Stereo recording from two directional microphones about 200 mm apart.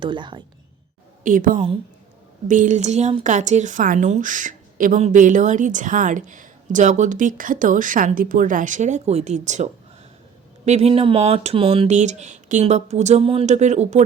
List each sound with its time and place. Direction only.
0.0 s speech: 25° right (ahead or behind)
1.2 s speech: 40° right (ahead or behind)